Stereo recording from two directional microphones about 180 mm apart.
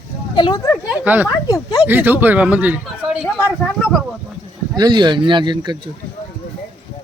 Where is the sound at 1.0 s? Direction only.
10° right (ahead or behind).